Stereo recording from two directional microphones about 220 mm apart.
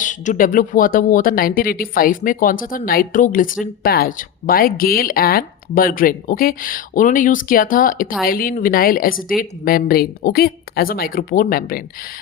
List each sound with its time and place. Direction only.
0.0 s speech: 35° left (ahead or behind)